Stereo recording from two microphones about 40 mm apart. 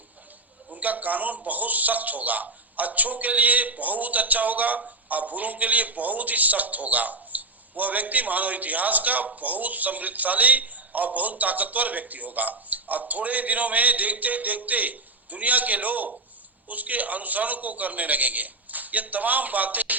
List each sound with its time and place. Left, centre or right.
0.8 s a man's voice: right